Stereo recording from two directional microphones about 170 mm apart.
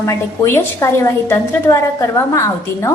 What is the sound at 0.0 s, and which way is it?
A woman's voice, 15° left (ahead or behind).